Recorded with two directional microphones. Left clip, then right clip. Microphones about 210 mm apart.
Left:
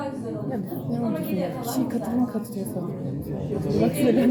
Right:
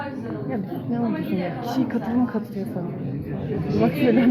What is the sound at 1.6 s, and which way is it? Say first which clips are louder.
Speech: right 2 dB; 15° right (ahead or behind).